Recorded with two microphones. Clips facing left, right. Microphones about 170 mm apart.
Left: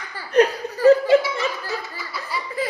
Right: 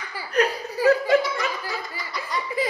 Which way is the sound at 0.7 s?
10° right (ahead or behind).